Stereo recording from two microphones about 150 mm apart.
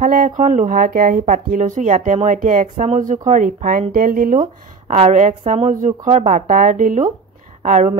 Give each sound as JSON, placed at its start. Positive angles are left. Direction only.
{"t": 0.0, "sound": "speech", "side_deg": -65}
{"t": 4.9, "sound": "a woman's voice", "side_deg": -45}